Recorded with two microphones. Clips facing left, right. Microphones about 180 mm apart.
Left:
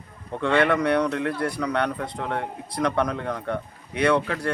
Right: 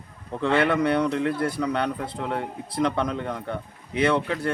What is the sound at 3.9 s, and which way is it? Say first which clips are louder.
Speech: left 1 dB; 25° right (ahead or behind).